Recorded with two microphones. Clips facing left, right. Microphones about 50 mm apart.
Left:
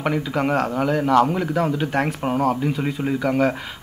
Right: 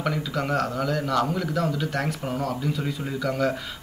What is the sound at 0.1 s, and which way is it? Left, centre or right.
A man's voice, left.